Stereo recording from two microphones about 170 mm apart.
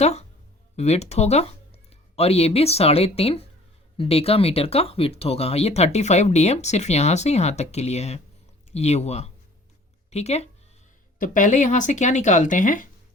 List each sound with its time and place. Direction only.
0.0 s speech: 40° left (ahead or behind)